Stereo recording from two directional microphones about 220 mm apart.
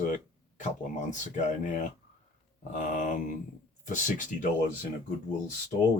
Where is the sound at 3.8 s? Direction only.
35° left (ahead or behind).